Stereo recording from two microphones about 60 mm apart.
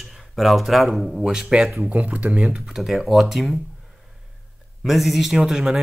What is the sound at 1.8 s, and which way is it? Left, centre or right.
Speech, right.